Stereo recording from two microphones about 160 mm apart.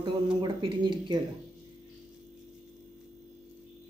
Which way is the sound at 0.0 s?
30° right (ahead or behind).